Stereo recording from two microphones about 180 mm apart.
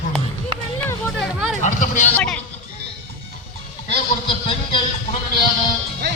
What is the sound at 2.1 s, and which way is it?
Speech, 5° left (ahead or behind).